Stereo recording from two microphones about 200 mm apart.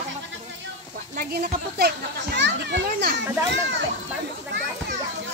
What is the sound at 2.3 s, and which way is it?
Speech, 60° right (ahead or behind).